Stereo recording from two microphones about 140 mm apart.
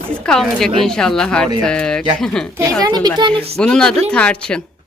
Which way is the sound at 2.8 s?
30° right (ahead or behind).